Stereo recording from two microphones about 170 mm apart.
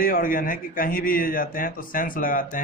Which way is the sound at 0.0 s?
55° left (ahead or behind).